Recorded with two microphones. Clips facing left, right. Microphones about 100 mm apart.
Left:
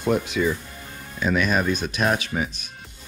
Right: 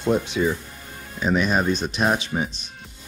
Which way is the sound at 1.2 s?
25° right (ahead or behind).